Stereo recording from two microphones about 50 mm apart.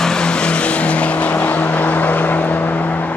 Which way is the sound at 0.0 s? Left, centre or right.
Centre.